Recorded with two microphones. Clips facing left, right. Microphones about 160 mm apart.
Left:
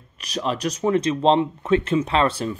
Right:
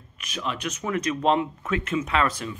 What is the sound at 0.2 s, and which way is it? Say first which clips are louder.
Speech: left 6 dB; 35° left (ahead or behind).